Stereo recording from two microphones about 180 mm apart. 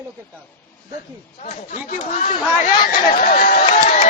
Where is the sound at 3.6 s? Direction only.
40° left (ahead or behind).